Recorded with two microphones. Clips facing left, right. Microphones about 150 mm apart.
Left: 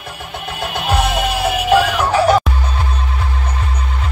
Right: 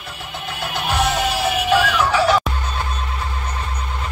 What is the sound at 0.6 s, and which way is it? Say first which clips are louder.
Music: left 3 dB; 55° left (ahead or behind).